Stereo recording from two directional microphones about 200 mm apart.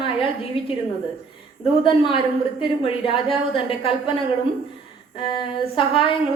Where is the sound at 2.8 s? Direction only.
25° left (ahead or behind).